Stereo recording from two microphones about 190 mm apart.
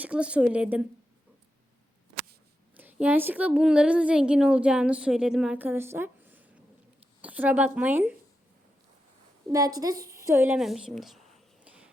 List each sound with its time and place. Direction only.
0.0 s a woman's voice: 5° right (ahead or behind)
2.7 s a woman's voice: 10° right (ahead or behind)
9.5 s a woman's voice: 20° right (ahead or behind)
10.0 s a sound: 15° right (ahead or behind)